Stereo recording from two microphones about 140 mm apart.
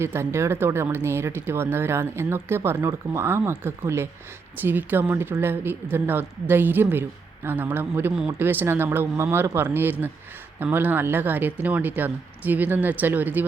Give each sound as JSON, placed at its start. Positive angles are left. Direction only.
{"t": 0.0, "sound": "speech", "side_deg": -15}